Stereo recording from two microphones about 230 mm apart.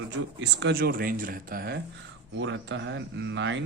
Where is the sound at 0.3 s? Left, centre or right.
Right.